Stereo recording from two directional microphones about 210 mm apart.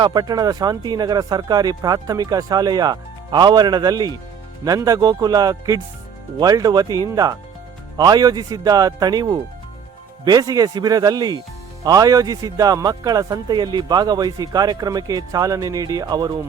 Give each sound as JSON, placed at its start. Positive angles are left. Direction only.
{"t": 0.0, "sound": "speech", "side_deg": -20}